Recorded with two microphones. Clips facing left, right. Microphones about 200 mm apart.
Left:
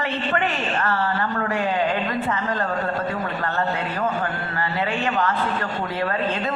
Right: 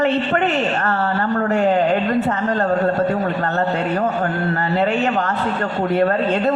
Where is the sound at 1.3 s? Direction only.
45° right (ahead or behind).